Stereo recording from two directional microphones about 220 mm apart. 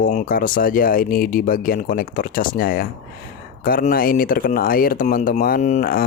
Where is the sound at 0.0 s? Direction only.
35° left (ahead or behind).